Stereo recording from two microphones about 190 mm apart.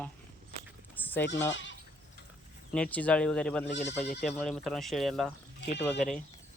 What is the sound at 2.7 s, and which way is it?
Speech, 5° left (ahead or behind).